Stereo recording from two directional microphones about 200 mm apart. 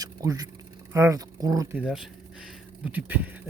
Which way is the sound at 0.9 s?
15° right (ahead or behind).